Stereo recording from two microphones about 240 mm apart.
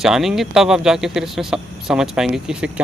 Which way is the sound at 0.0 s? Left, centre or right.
Centre.